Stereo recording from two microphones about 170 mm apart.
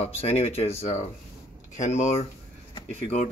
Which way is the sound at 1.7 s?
45° left (ahead or behind).